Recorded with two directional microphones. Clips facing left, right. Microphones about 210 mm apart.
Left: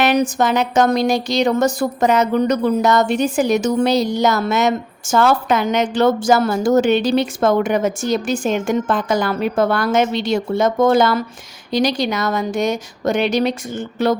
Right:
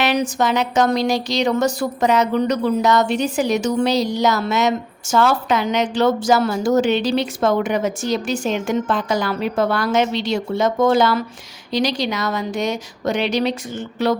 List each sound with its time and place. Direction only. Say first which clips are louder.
0.0 s a woman's voice: left 3 dB; 50° left (ahead or behind)